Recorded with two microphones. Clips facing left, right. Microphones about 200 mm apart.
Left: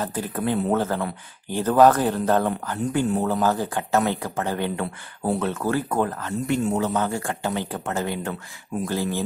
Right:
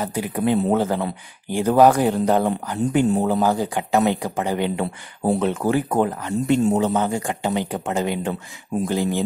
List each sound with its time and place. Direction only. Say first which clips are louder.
0.0 s speech: right 4 dB; 15° right (ahead or behind)